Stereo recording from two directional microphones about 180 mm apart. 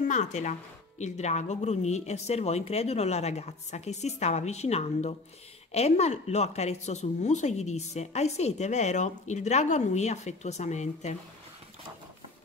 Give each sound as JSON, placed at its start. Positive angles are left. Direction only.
{"t": 0.1, "sound": "speech", "side_deg": 40}